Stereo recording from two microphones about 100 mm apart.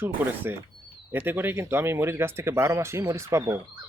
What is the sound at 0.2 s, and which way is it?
Speech, 20° right (ahead or behind).